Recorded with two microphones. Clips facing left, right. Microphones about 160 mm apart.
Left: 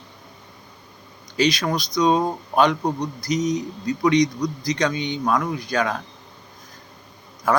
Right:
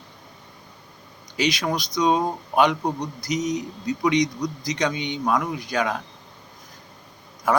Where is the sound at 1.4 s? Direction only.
15° right (ahead or behind).